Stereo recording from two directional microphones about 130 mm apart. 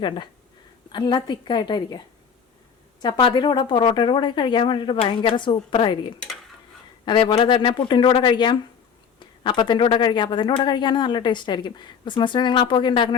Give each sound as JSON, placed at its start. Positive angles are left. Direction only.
{"t": 0.9, "sound": "speech", "side_deg": 35}
{"t": 3.0, "sound": "speech", "side_deg": 40}